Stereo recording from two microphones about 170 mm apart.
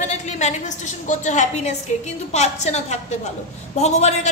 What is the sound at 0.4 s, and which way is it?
A woman's voice, 45° left (ahead or behind).